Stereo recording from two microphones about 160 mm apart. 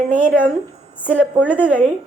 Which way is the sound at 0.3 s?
10° left (ahead or behind).